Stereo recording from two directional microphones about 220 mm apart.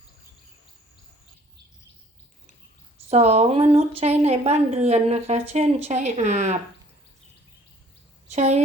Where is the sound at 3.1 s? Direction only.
30° right (ahead or behind).